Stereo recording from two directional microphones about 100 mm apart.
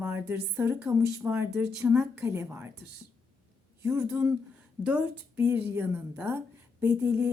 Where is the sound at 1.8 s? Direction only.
5° right (ahead or behind).